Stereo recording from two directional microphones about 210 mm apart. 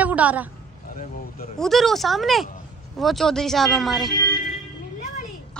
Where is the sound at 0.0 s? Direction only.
5° right (ahead or behind).